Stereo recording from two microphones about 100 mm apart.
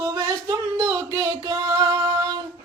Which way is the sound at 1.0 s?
35° right (ahead or behind).